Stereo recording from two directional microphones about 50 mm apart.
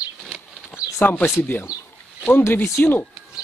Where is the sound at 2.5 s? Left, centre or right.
Left.